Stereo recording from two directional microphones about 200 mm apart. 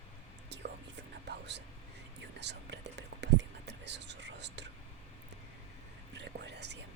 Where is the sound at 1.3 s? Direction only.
60° right (ahead or behind).